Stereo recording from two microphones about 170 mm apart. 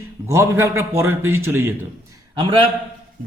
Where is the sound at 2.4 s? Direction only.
30° right (ahead or behind).